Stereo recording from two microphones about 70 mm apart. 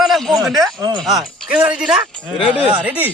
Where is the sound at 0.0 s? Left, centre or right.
Centre.